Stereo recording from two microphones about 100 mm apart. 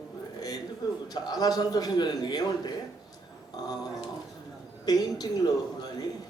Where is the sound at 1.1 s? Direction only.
40° left (ahead or behind).